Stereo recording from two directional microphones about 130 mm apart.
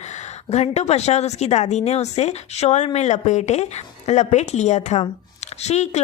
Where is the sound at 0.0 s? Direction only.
60° left (ahead or behind).